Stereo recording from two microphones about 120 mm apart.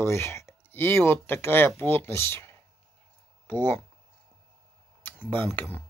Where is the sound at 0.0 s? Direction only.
25° left (ahead or behind).